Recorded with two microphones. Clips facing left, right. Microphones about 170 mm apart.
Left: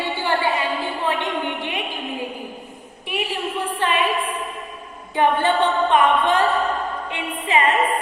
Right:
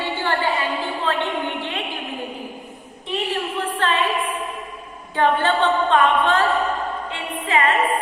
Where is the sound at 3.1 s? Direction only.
10° left (ahead or behind).